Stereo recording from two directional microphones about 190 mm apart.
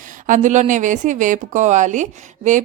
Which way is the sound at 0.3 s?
40° right (ahead or behind).